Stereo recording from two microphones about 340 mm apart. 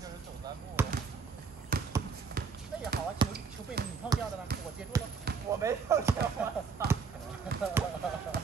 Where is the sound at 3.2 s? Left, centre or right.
Centre.